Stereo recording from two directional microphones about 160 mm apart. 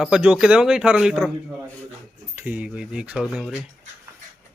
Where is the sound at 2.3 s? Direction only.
10° right (ahead or behind).